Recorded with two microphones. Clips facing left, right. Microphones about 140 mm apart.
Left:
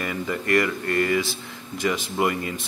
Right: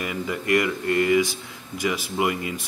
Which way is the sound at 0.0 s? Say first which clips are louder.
Even; 10° right (ahead or behind).